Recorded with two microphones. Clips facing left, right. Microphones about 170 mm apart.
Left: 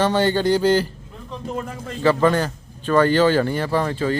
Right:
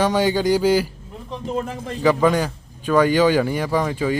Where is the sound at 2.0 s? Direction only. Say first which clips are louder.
Even; 10° right (ahead or behind).